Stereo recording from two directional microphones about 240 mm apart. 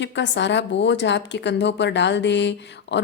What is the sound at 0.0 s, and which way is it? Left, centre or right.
A woman's voice, left.